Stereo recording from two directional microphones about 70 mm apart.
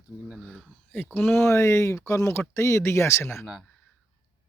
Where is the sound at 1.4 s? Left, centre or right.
Left.